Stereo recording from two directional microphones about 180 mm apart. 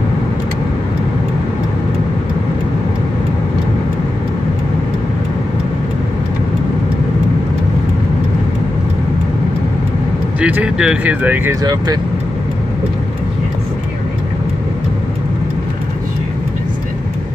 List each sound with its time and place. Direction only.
10.4 s speech: 5° right (ahead or behind)
11.6 s speech: 20° right (ahead or behind)